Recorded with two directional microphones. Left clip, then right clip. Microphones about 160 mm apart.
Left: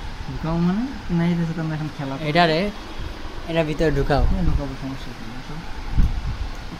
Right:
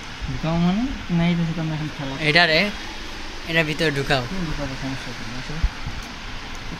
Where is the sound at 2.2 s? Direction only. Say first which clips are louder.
Right 2 dB; 15° left (ahead or behind).